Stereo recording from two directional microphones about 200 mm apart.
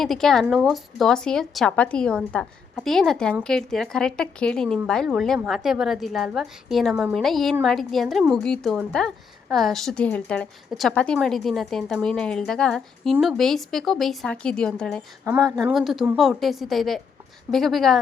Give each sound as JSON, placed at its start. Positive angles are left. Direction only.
{"t": 0.0, "sound": "a woman's voice", "side_deg": 0}